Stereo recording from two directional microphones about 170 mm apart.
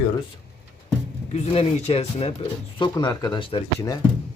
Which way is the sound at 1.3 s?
35° left (ahead or behind).